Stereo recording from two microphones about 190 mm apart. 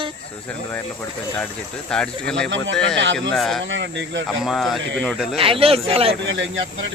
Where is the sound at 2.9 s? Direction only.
75° right (ahead or behind).